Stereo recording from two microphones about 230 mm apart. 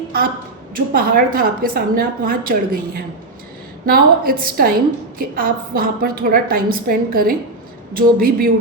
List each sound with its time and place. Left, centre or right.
0.7 s a woman's voice: right